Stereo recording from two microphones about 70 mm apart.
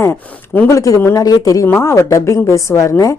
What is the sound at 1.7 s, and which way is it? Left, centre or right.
A woman's voice, left.